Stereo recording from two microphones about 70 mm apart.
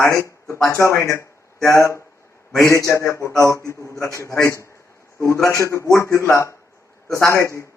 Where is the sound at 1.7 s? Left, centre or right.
Left.